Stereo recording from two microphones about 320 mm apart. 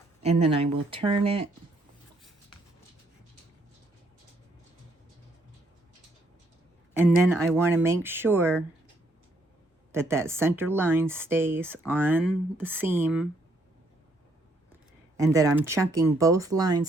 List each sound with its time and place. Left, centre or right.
0.2 s speech: centre
6.9 s speech: centre
9.9 s speech: centre
15.3 s speech: centre